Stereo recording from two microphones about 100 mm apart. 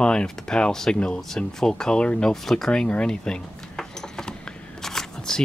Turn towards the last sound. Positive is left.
turn(degrees=5)  # may be behind; listen again after turning